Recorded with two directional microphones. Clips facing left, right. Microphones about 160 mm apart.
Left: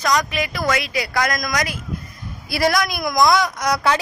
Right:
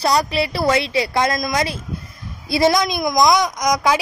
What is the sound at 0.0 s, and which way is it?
A woman's voice, 35° right (ahead or behind).